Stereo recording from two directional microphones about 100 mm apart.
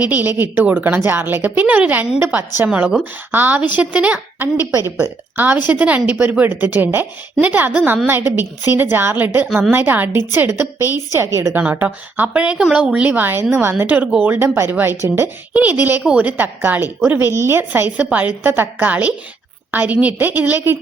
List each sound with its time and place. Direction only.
0.1 s a woman's voice: 20° right (ahead or behind)
10.8 s a woman's voice: 30° left (ahead or behind)
11.1 s a woman's voice: 30° right (ahead or behind)
11.6 s a woman's voice: 15° right (ahead or behind)